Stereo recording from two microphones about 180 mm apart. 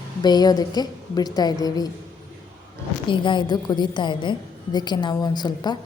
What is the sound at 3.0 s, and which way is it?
A woman's voice, 25° left (ahead or behind).